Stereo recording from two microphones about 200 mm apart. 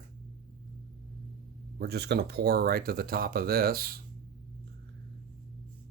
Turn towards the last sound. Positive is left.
turn(degrees=-50)  # may be behind; listen again after turning